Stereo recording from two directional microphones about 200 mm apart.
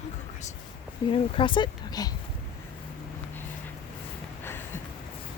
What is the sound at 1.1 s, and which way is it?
Speech, 25° left (ahead or behind).